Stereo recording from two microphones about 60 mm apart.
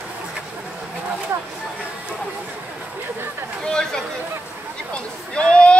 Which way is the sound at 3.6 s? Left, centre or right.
Centre.